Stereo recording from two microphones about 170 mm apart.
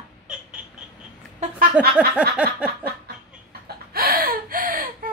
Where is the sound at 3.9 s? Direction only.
60° right (ahead or behind).